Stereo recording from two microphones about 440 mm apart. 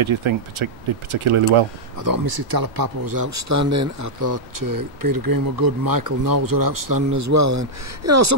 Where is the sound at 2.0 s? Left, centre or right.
Right.